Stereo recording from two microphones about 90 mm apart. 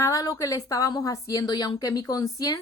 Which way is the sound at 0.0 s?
40° left (ahead or behind).